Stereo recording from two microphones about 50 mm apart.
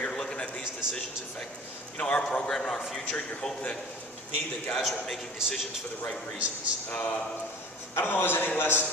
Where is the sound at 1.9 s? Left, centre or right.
Left.